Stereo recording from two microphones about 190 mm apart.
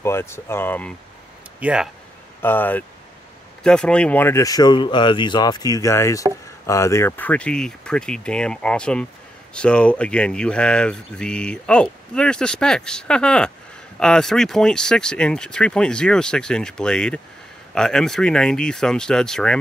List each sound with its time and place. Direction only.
0.0 s speech: 15° left (ahead or behind)
1.6 s speech: 5° right (ahead or behind)
2.4 s speech: 10° left (ahead or behind)